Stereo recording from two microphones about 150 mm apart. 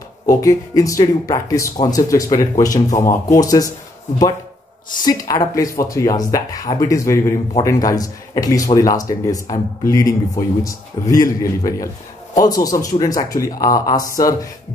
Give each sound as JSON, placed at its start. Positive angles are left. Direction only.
{"t": 0.3, "sound": "speech", "side_deg": 20}
{"t": 5.0, "sound": "speech", "side_deg": 25}